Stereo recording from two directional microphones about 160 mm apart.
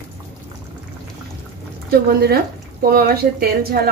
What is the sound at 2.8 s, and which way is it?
Speech, 70° right (ahead or behind).